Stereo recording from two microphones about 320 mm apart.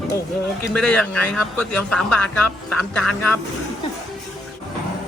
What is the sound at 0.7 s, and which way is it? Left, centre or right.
A man's voice, centre.